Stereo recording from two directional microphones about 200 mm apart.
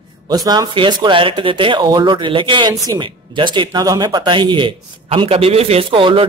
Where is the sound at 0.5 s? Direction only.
20° right (ahead or behind).